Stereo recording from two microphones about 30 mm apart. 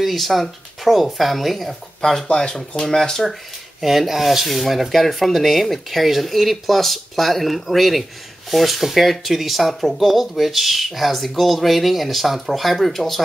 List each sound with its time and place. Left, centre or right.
0.0 s speech: centre
2.0 s speech: left
3.8 s speech: centre